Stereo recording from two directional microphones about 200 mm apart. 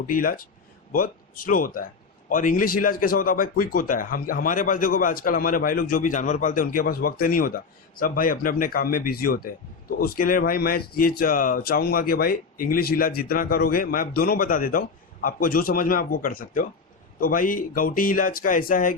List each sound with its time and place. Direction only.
0.1 s speech: 45° left (ahead or behind)